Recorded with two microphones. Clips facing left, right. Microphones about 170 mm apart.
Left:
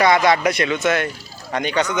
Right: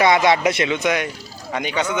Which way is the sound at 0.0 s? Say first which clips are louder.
Even; 20° right (ahead or behind).